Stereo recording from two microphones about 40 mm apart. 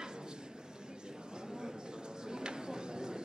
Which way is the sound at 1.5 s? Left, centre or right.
Centre.